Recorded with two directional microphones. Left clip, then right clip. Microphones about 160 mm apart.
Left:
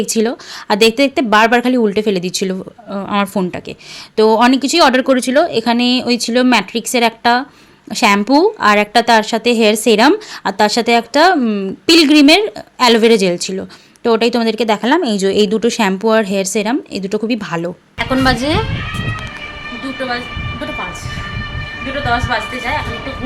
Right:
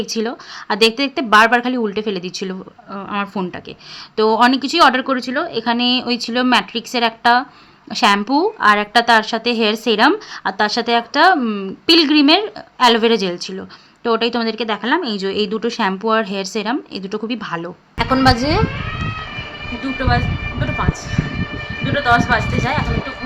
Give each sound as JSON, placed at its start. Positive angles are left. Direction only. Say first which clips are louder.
{"t": 0.1, "sound": "a woman's voice", "louder": "left 6 dB", "side_deg": 30}
{"t": 18.1, "sound": "a woman's voice", "louder": "even", "side_deg": 10}
{"t": 22.1, "sound": "speech", "louder": "right 2 dB", "side_deg": 0}